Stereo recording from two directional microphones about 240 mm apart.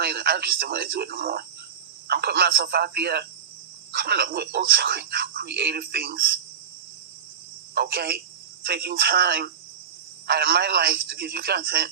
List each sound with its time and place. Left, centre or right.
0.0 s speech: right
7.8 s speech: right